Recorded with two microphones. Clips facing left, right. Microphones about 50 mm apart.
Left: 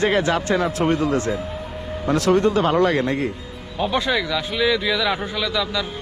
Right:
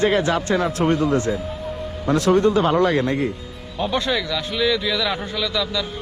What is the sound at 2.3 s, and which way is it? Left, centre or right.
Speech, left.